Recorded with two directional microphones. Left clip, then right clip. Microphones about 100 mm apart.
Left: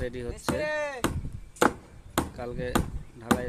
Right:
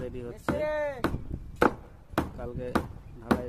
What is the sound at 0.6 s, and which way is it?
Speech, 35° left (ahead or behind).